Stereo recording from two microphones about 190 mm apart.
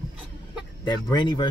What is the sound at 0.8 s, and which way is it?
Speech, 25° left (ahead or behind).